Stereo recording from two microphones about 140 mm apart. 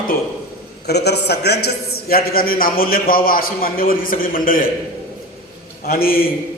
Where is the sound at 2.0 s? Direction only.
90° left.